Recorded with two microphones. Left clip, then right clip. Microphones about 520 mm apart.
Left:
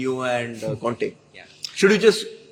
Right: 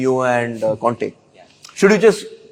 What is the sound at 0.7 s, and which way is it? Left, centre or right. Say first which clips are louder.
A man's voice: right 7 dB; centre.